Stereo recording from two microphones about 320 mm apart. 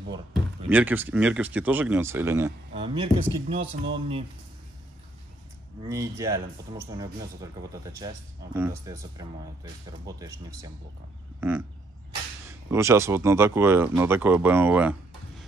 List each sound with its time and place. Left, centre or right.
0.7 s speech: centre
5.9 s speech: centre
7.7 s speech: centre
12.4 s speech: centre